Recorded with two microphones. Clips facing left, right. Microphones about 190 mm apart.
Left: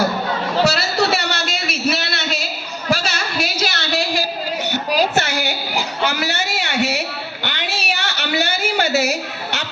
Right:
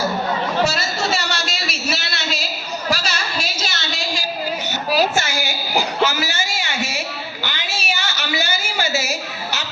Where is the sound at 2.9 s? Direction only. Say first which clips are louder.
Left 4 dB; 60° left (ahead or behind).